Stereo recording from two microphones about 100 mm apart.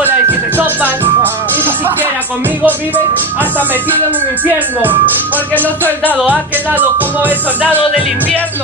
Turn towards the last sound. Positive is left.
turn(degrees=-20)  # may be behind; listen again after turning